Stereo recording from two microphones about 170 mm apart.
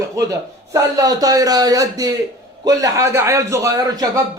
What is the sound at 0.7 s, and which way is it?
A man's voice, 20° right (ahead or behind).